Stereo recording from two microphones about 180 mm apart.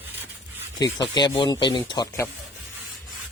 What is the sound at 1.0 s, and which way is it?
Speech, 25° left (ahead or behind).